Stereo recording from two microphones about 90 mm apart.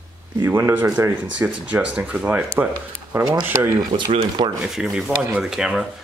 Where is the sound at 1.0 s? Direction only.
20° right (ahead or behind).